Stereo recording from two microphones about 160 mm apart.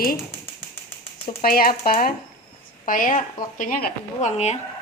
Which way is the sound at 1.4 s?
65° left (ahead or behind).